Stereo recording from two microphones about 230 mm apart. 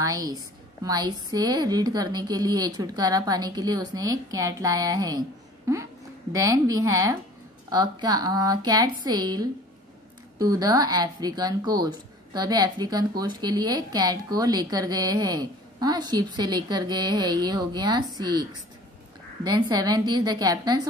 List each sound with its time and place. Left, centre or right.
0.0 s a woman's voice: centre